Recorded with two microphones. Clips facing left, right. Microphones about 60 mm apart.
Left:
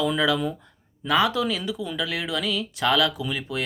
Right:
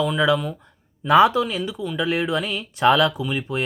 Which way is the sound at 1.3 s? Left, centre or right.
Right.